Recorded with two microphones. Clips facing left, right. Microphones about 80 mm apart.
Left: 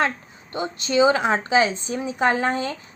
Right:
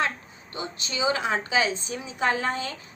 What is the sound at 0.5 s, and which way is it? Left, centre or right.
A woman's voice, left.